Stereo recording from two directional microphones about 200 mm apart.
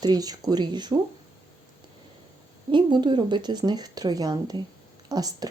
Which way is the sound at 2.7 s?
25° right (ahead or behind).